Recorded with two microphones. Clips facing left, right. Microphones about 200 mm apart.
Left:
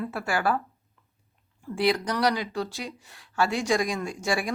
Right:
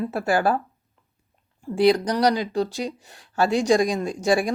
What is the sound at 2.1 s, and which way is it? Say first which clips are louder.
Speech: right 5 dB; 35° right (ahead or behind).